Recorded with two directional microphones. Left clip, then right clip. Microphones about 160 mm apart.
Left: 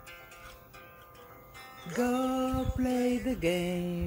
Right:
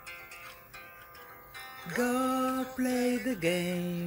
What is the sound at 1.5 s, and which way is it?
Music, 45° right (ahead or behind).